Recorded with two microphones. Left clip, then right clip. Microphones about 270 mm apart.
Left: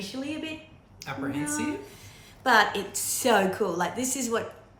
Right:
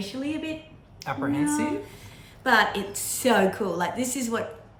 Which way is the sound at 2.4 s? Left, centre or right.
Centre.